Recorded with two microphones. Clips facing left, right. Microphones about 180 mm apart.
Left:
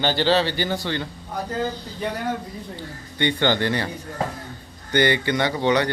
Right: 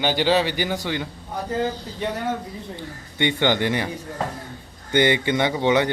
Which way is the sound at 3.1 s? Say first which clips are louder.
Even; 15° right (ahead or behind).